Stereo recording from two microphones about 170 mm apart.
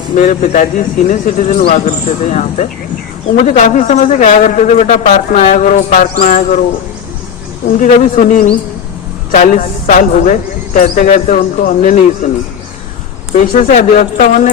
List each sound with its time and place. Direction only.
0.1 s speech: 50° left (ahead or behind)
7.8 s speech: 50° left (ahead or behind)
13.3 s speech: 55° left (ahead or behind)